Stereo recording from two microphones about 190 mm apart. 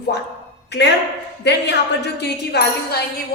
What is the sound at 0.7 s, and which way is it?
A woman's voice, 65° left (ahead or behind).